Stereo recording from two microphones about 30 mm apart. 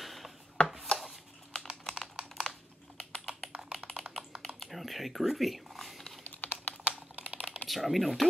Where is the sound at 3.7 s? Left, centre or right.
Centre.